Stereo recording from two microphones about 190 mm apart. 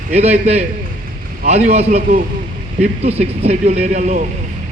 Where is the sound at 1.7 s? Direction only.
35° right (ahead or behind).